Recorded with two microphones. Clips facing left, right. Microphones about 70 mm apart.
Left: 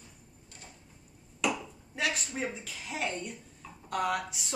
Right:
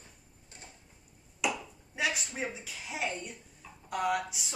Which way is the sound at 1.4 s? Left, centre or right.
Centre.